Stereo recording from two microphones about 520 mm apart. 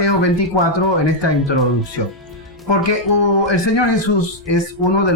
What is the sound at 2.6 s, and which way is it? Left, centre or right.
Speech, left.